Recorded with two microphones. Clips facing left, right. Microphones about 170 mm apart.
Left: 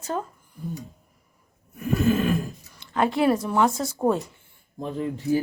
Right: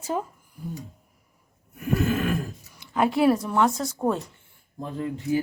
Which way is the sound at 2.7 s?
10° right (ahead or behind).